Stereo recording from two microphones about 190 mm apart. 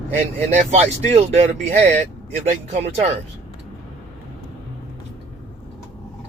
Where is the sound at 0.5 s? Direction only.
35° right (ahead or behind).